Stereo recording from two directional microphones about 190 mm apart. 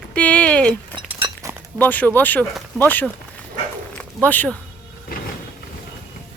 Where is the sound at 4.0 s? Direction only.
10° left (ahead or behind).